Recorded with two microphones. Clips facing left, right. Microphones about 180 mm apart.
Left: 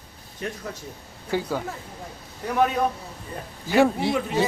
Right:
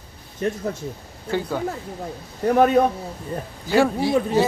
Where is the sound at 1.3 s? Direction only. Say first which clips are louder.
Right 2 dB; 5° left (ahead or behind).